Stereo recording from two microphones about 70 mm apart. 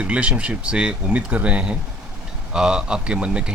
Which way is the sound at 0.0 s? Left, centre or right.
Centre.